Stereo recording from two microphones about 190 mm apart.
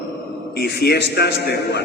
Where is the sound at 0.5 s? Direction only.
60° left (ahead or behind).